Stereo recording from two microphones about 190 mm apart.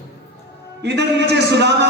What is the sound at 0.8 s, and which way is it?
A man's voice, 60° right (ahead or behind).